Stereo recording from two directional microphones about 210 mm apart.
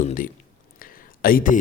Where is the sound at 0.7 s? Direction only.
40° left (ahead or behind).